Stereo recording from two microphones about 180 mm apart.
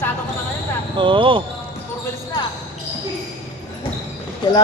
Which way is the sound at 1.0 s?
30° right (ahead or behind).